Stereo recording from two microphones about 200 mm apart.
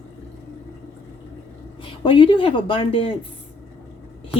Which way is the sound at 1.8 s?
25° left (ahead or behind).